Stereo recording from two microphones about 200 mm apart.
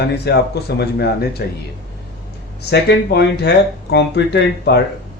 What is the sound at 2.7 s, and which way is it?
Speech, 55° left (ahead or behind).